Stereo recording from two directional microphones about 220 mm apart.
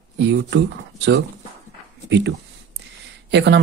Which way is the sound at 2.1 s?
55° right (ahead or behind).